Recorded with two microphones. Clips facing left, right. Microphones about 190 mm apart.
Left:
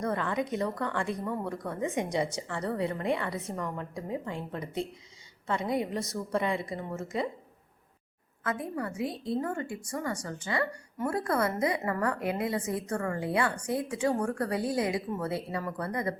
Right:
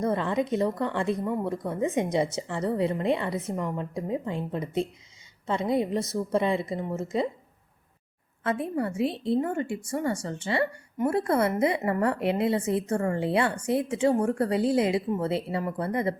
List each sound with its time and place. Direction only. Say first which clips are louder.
0.0 s a woman's voice: right 4 dB; 25° right (ahead or behind)
8.7 s a woman's voice: right 6 dB; 25° right (ahead or behind)